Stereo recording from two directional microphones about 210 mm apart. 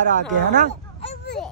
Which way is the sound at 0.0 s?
35° right (ahead or behind).